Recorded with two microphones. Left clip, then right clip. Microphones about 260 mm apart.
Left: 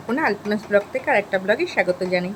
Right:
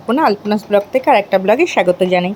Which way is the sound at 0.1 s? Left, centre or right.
Centre.